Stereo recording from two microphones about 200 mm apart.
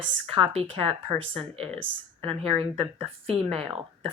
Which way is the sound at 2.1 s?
30° right (ahead or behind).